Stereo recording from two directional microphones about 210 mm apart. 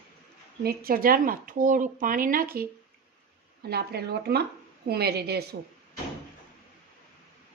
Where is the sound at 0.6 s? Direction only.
45° right (ahead or behind).